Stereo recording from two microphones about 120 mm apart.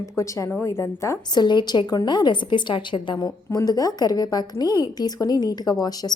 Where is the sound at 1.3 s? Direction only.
40° left (ahead or behind).